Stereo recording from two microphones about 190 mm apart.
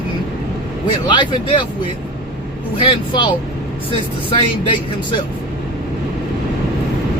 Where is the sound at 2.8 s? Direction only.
25° left (ahead or behind).